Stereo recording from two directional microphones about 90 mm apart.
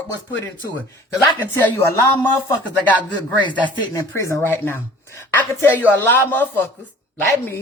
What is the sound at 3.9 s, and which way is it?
Speech, 35° left (ahead or behind).